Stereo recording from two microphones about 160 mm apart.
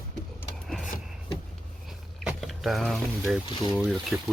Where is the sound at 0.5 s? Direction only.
Centre (ahead or behind).